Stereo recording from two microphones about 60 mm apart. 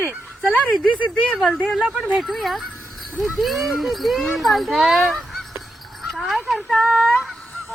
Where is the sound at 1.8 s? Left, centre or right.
Centre.